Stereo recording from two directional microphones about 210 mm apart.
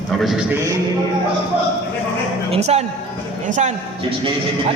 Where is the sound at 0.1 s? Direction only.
Centre (ahead or behind).